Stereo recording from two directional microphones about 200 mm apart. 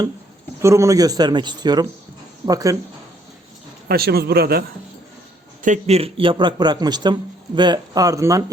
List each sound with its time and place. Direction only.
0.6 s a man's voice: 15° right (ahead or behind)
3.8 s speech: 50° right (ahead or behind)
5.6 s a man's voice: 35° right (ahead or behind); by 8.4 s 15° right (ahead or behind)